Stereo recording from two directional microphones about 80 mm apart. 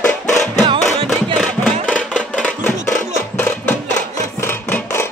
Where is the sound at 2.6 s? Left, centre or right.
Left.